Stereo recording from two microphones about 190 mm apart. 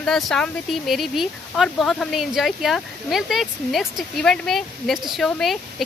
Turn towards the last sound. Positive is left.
turn(degrees=0)  # may be behind; listen again after turning